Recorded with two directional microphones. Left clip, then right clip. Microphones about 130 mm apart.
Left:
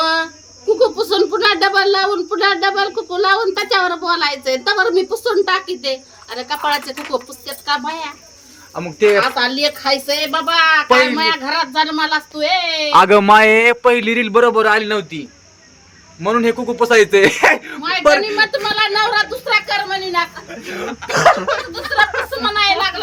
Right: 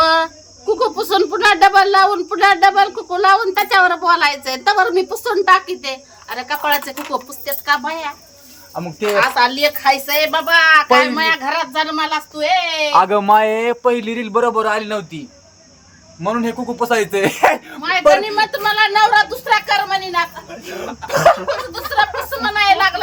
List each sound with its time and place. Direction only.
0.0 s a sound: 15° right (ahead or behind)
0.8 s speech: 15° right (ahead or behind)
8.7 s speech: 20° left (ahead or behind)
9.1 s speech: 10° right (ahead or behind)
13.0 s a man's voice: 35° left (ahead or behind)
16.2 s speech: 25° left (ahead or behind)
18.5 s speech: 10° right (ahead or behind)
20.5 s speech: 25° left (ahead or behind)
21.7 s a woman's voice: 10° right (ahead or behind)